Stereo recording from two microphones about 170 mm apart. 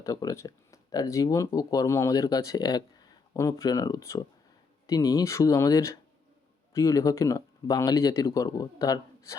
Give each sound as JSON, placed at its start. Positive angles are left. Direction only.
{"t": 0.0, "sound": "speech", "side_deg": 20}